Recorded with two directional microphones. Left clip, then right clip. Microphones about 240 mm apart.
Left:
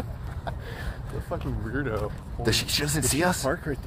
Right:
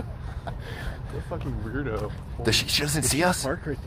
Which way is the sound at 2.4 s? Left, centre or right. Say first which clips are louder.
Right 2 dB; centre.